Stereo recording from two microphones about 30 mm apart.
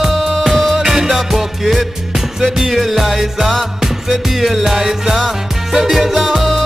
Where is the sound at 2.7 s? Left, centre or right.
Centre.